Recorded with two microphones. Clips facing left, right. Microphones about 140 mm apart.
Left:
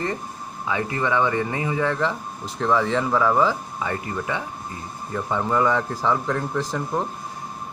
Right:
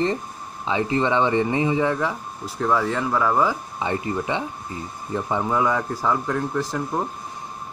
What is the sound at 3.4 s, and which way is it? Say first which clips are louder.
A man's voice: left 1 dB; 15° right (ahead or behind).